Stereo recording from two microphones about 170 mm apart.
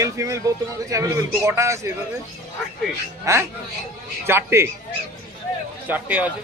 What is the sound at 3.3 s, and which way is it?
A man's voice, 20° right (ahead or behind).